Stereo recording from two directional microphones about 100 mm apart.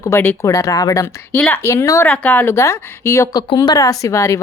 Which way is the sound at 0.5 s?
35° left (ahead or behind).